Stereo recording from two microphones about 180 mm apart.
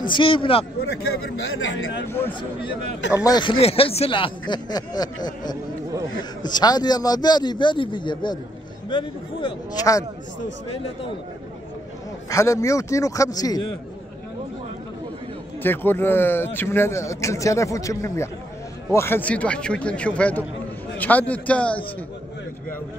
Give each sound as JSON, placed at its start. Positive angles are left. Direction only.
{"t": 0.0, "sound": "speech", "side_deg": 25}
{"t": 2.0, "sound": "speech", "side_deg": 10}
{"t": 12.3, "sound": "speech", "side_deg": 15}
{"t": 15.6, "sound": "speech", "side_deg": 10}